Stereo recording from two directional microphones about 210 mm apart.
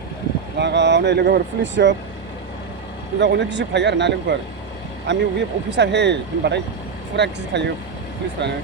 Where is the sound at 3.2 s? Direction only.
55° right (ahead or behind).